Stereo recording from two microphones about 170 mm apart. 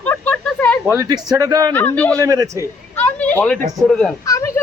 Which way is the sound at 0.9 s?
20° right (ahead or behind).